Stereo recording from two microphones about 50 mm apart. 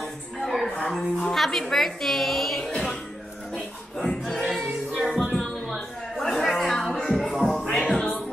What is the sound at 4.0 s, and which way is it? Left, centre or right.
Music, centre.